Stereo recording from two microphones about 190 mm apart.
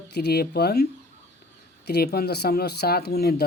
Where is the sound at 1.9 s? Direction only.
55° left (ahead or behind).